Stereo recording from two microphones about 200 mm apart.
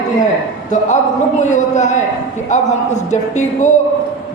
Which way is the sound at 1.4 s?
35° left (ahead or behind).